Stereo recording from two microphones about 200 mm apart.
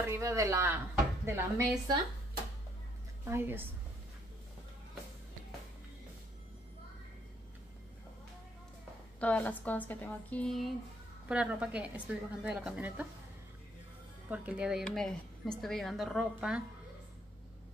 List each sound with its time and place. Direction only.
0.0 s speech: 15° right (ahead or behind)
3.3 s speech: 10° right (ahead or behind)
9.2 s a woman's voice: 10° left (ahead or behind)
14.3 s a woman's voice: 5° right (ahead or behind)